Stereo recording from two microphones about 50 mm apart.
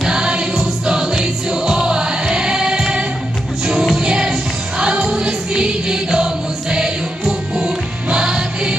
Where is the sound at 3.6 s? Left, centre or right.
Centre.